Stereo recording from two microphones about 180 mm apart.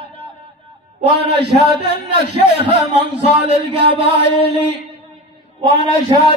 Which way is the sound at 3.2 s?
35° right (ahead or behind).